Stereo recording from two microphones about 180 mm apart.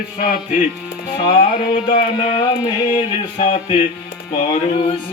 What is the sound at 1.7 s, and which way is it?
Music, 40° left (ahead or behind).